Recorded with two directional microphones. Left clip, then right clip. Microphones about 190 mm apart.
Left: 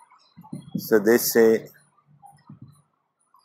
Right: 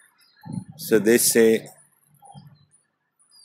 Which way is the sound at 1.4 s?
20° right (ahead or behind).